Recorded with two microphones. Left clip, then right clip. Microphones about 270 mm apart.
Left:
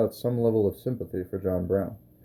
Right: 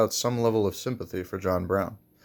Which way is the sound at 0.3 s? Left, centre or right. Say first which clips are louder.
Even; right.